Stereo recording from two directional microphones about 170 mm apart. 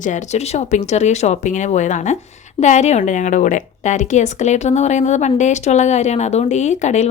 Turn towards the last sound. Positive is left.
turn(degrees=40)  # may be behind; listen again after turning